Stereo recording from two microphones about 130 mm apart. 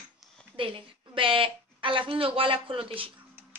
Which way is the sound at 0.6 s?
40° right (ahead or behind).